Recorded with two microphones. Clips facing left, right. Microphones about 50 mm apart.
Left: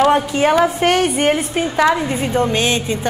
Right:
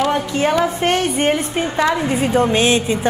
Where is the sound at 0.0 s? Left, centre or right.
Centre.